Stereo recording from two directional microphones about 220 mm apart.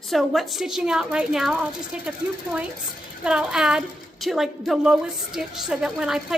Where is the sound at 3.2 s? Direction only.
5° right (ahead or behind).